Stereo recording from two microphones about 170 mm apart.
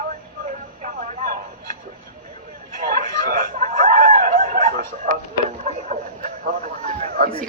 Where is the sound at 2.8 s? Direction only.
55° right (ahead or behind).